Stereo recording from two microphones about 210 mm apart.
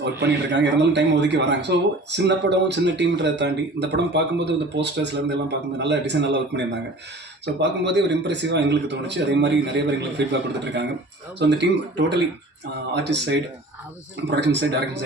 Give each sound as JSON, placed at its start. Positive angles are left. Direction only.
{"t": 0.0, "sound": "a man's voice", "side_deg": -55}
{"t": 7.4, "sound": "a man's voice", "side_deg": -55}
{"t": 11.3, "sound": "a man's voice", "side_deg": -55}